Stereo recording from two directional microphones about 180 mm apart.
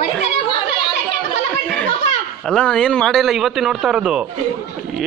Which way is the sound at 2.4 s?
5° left (ahead or behind).